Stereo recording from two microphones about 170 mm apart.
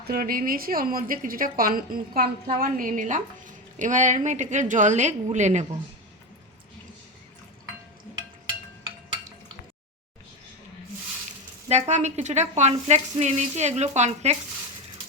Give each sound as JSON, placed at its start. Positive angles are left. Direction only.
{"t": 0.0, "sound": "a woman's voice", "side_deg": -60}
{"t": 11.7, "sound": "a woman's voice", "side_deg": -45}